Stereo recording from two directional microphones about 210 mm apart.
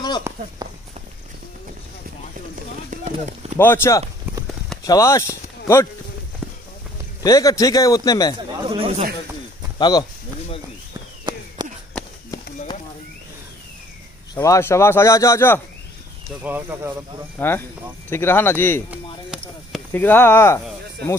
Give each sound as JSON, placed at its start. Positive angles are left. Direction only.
{"t": 0.3, "sound": "walk", "side_deg": -10}
{"t": 2.9, "sound": "a sound", "side_deg": -35}
{"t": 3.5, "sound": "speech", "side_deg": 10}
{"t": 6.4, "sound": "clip-clop", "side_deg": 0}
{"t": 7.2, "sound": "speech", "side_deg": 15}
{"t": 8.6, "sound": "speech", "side_deg": -25}
{"t": 9.8, "sound": "speech", "side_deg": 20}
{"t": 11.3, "sound": "a sound", "side_deg": -20}
{"t": 14.3, "sound": "speech", "side_deg": 15}
{"t": 16.4, "sound": "speech", "side_deg": -10}
{"t": 17.4, "sound": "speech", "side_deg": 10}
{"t": 19.9, "sound": "speech", "side_deg": 10}